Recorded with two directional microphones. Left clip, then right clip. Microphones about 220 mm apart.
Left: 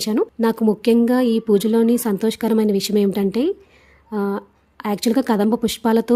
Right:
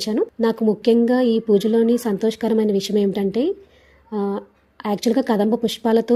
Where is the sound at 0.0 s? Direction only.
30° left (ahead or behind).